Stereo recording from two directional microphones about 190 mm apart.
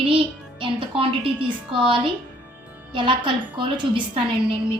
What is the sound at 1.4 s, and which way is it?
Speech, 5° right (ahead or behind).